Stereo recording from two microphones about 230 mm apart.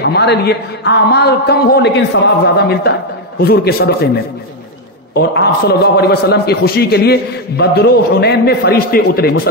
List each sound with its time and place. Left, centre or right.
0.0 s a man's voice: left
5.1 s a man's voice: left